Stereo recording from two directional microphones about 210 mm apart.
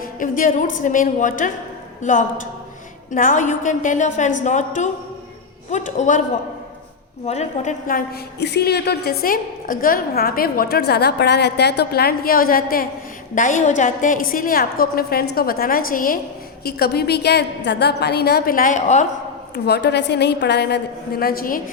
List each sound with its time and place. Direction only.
0.2 s a woman's voice: 40° left (ahead or behind)
7.3 s a woman's voice: 35° left (ahead or behind)
19.5 s a woman's voice: 50° left (ahead or behind)